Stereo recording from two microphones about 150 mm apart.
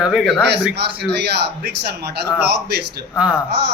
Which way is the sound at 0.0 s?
Centre (ahead or behind).